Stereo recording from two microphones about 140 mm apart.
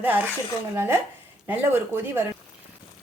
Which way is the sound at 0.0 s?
15° right (ahead or behind).